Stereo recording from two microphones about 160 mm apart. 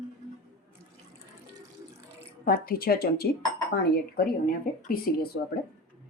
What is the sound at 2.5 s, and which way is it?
Speech, 70° left (ahead or behind).